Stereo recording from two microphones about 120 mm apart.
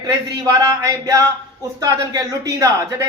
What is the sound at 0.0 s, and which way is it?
Speech, 30° right (ahead or behind).